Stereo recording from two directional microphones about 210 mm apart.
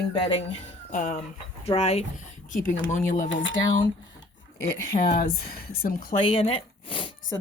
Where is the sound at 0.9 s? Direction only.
40° left (ahead or behind).